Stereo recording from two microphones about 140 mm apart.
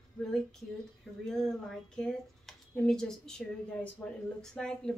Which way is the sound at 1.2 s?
5° left (ahead or behind).